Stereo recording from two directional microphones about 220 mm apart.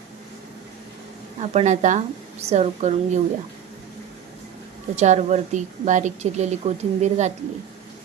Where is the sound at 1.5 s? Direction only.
30° right (ahead or behind).